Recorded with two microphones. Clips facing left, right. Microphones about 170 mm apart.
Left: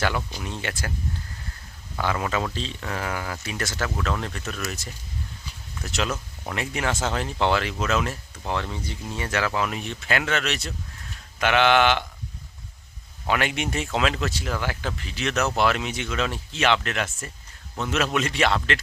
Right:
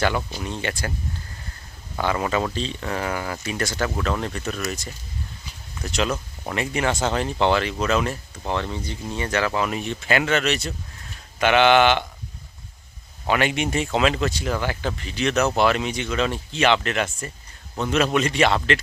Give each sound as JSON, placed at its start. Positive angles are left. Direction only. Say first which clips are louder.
{"t": 0.2, "sound": "speech", "louder": "right 3 dB", "side_deg": -5}
{"t": 0.4, "sound": "speech", "louder": "right 3 dB", "side_deg": 5}
{"t": 2.0, "sound": "speech", "louder": "right 3 dB", "side_deg": 0}
{"t": 13.2, "sound": "speech", "louder": "right 3 dB", "side_deg": 0}